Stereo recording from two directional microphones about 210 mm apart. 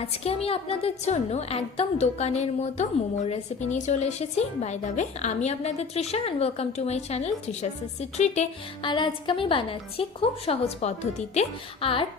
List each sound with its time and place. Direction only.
0.4 s a woman's voice: 30° left (ahead or behind)